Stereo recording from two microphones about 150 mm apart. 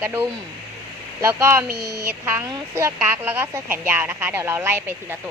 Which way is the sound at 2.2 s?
15° right (ahead or behind).